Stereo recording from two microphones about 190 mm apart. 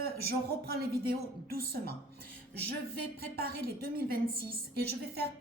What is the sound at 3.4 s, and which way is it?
A woman's voice, 50° right (ahead or behind).